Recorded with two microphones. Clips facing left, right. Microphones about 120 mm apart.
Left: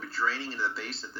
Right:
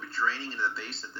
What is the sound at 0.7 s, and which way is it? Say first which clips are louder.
Speech: left 2 dB; 25° right (ahead or behind).